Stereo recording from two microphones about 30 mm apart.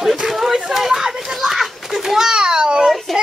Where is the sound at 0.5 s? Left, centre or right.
Centre.